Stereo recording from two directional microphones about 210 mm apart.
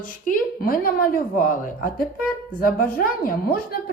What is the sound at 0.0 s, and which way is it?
A woman's voice, 40° left (ahead or behind).